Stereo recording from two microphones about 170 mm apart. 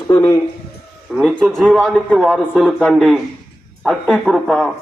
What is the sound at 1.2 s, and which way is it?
A man's voice, centre (ahead or behind).